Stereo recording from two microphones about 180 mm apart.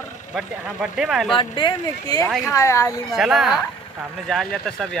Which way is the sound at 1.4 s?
25° left (ahead or behind).